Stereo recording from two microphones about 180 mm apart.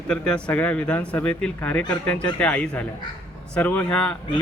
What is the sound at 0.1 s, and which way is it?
A man's voice, 5° left (ahead or behind).